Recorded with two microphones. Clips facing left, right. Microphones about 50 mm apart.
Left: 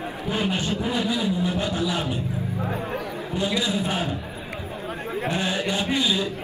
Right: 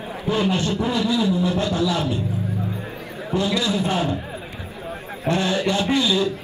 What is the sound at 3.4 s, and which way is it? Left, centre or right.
Speech, centre.